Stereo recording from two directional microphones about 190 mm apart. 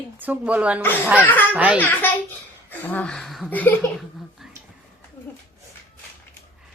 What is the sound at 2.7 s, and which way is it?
Speech, 10° left (ahead or behind).